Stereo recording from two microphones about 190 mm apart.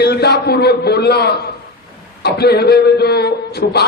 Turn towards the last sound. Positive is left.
turn(degrees=60)  # may be behind; listen again after turning